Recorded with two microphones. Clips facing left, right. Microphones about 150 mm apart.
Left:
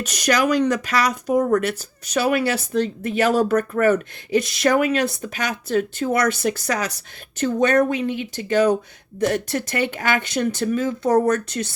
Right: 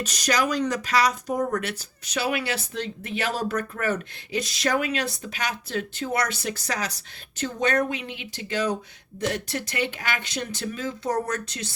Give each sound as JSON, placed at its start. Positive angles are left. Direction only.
{"t": 0.0, "sound": "speech", "side_deg": 60}